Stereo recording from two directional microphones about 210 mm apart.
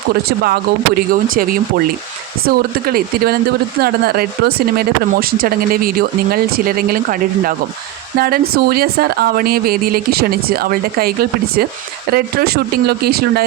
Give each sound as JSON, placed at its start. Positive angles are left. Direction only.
{"t": 0.1, "sound": "speech", "side_deg": -50}